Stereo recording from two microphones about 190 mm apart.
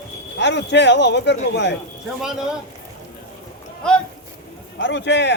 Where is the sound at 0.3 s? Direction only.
65° left (ahead or behind).